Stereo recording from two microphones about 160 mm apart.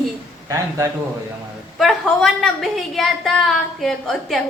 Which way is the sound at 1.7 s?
Centre (ahead or behind).